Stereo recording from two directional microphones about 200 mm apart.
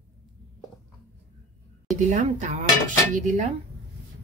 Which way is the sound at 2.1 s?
35° right (ahead or behind).